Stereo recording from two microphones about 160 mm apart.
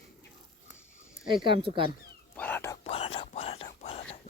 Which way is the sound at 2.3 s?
10° left (ahead or behind).